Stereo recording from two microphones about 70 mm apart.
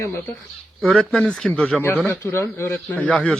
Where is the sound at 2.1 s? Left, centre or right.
Left.